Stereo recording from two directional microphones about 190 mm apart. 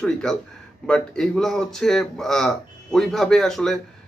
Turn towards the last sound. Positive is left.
turn(degrees=0)  # may be behind; listen again after turning